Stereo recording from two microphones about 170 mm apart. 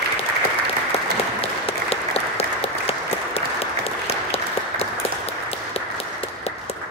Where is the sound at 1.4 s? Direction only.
35° left (ahead or behind).